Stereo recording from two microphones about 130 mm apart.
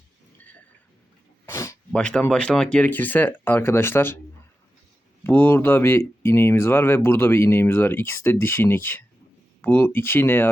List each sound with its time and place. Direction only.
1.5 s a sound: 20° left (ahead or behind)
1.9 s speech: 5° left (ahead or behind)
5.2 s speech: 15° left (ahead or behind)